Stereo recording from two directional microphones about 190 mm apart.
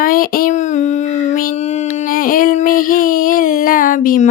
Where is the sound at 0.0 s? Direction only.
50° left (ahead or behind).